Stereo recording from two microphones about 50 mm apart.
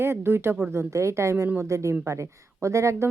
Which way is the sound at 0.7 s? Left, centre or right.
Right.